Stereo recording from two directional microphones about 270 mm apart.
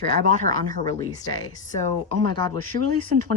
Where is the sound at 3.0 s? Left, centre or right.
Right.